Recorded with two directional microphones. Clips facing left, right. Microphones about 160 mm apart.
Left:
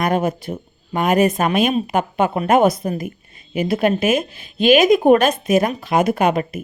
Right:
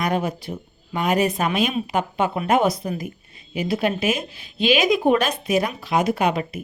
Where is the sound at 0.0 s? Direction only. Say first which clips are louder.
Left 4 dB; 50° left (ahead or behind).